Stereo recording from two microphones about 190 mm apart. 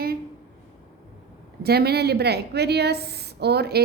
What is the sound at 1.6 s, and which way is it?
A woman's voice, 55° right (ahead or behind).